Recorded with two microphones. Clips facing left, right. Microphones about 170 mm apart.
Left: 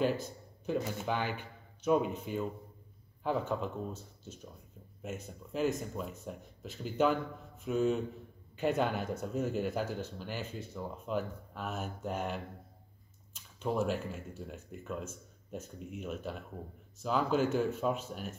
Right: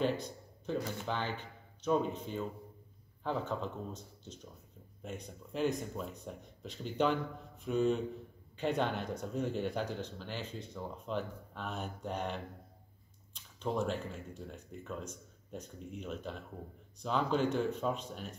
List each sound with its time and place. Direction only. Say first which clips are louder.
0.0 s speech: left 2 dB; 5° left (ahead or behind)